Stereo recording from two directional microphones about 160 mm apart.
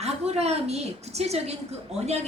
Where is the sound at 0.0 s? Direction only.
40° right (ahead or behind).